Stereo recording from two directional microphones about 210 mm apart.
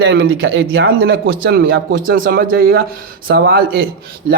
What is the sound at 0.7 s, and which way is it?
Speech, 50° right (ahead or behind).